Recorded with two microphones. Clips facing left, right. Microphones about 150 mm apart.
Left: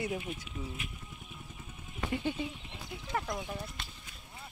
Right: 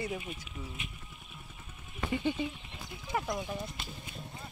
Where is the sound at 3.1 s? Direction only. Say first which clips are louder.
Right 1 dB; 10° right (ahead or behind).